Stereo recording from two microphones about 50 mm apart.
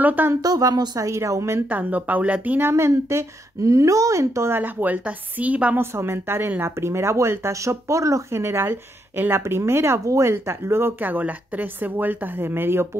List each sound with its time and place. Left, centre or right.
0.0 s a woman's voice: right
1.0 s a woman's voice: right
1.7 s a woman's voice: right
2.7 s a woman's voice: right
4.5 s a woman's voice: right
5.8 s a woman's voice: right
6.6 s speech: right
11.0 s a woman's voice: right